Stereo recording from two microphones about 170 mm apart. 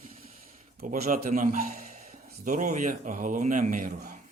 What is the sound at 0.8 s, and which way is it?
A man's voice, 50° right (ahead or behind).